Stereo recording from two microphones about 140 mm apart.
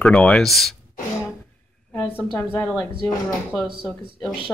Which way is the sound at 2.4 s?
15° left (ahead or behind).